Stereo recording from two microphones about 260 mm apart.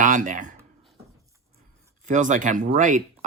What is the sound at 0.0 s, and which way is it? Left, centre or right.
Speech, right.